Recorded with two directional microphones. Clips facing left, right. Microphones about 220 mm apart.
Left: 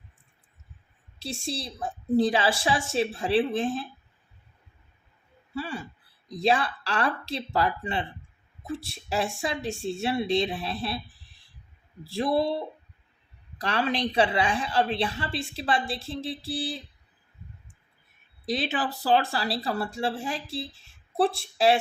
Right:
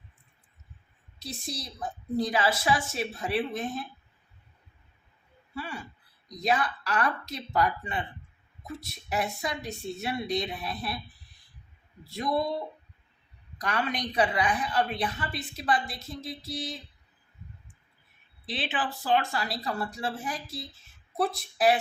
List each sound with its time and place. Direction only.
1.2 s a woman's voice: 30° left (ahead or behind)
5.5 s a woman's voice: 30° left (ahead or behind)
18.4 s a woman's voice: 40° left (ahead or behind)